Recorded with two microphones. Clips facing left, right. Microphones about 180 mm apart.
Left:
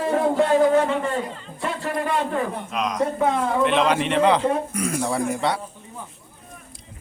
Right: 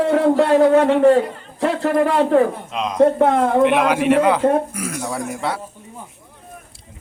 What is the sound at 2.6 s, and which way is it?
Speech, 25° right (ahead or behind).